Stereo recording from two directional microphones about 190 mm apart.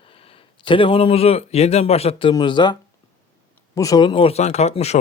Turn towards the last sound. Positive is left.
turn(degrees=35)  # may be behind; listen again after turning